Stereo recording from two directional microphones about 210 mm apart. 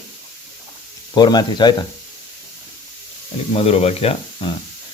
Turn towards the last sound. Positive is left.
turn(degrees=30)  # may be behind; listen again after turning